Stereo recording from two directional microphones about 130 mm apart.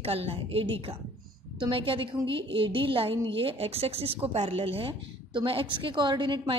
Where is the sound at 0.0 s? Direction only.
50° right (ahead or behind).